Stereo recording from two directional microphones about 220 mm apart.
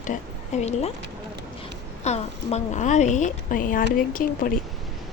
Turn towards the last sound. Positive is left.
turn(degrees=40)  # may be behind; listen again after turning